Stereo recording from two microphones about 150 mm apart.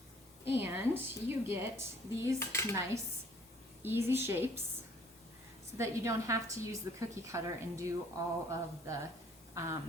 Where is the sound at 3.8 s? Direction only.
15° right (ahead or behind).